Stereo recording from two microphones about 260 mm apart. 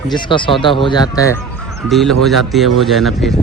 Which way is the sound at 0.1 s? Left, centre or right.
Centre.